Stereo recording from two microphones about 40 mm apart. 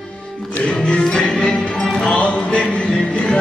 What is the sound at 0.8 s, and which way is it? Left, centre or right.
Music, left.